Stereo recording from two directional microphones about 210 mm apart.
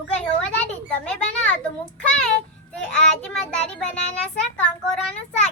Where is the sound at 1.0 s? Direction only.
5° left (ahead or behind).